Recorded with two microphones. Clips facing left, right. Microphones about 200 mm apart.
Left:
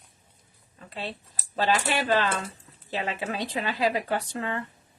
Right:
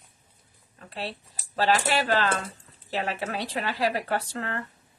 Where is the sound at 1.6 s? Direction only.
15° left (ahead or behind).